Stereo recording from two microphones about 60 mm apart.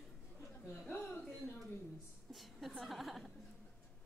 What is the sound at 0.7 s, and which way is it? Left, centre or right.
Chuckle, left.